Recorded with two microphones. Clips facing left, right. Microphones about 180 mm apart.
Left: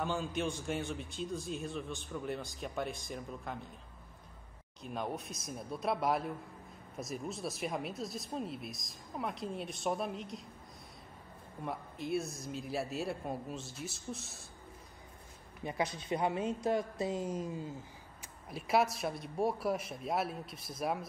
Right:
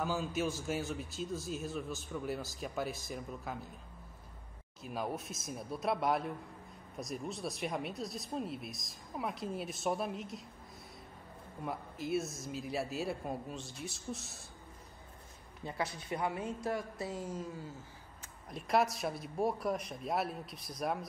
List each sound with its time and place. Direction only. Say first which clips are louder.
0.0 s a man's voice: even; 5° right (ahead or behind)
4.8 s a man's voice: even; 5° right (ahead or behind)
11.6 s a man's voice: even; centre (ahead or behind)
15.6 s a woman's voice: left 3 dB; 20° left (ahead or behind)
18.2 s a man's voice: left 1 dB; 5° left (ahead or behind)